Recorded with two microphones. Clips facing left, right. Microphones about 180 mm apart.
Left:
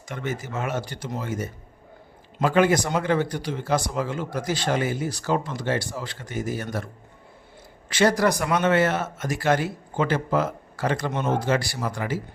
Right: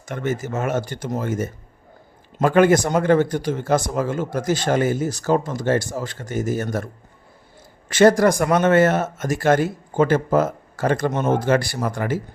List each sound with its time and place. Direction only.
0.0 s a man's voice: 50° right (ahead or behind)
7.9 s a man's voice: 50° right (ahead or behind)